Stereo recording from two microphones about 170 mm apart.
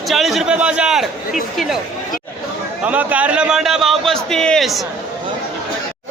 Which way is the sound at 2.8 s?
10° right (ahead or behind).